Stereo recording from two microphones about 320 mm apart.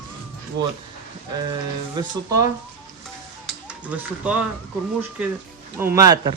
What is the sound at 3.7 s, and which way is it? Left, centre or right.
Speech, centre.